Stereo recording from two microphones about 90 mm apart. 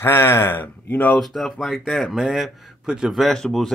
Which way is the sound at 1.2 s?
Centre (ahead or behind).